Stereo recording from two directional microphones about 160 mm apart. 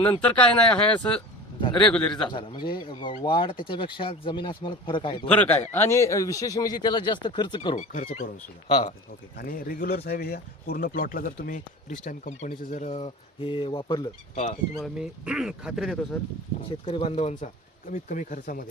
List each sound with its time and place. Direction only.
0.2 s speech: 10° left (ahead or behind)
2.2 s speech: 30° left (ahead or behind)
5.3 s speech: 10° left (ahead or behind); by 7.8 s 30° left (ahead or behind)
7.8 s speech: 50° left (ahead or behind)
8.6 s speech: 30° left (ahead or behind)
9.3 s speech: 65° left (ahead or behind); by 14.1 s 30° left (ahead or behind)
14.8 s speech: 5° right (ahead or behind)
16.8 s speech: 35° left (ahead or behind); by 18.6 s 55° left (ahead or behind)